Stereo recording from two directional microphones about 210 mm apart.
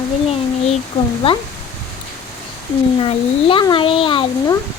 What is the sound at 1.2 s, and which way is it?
Speech, 25° left (ahead or behind).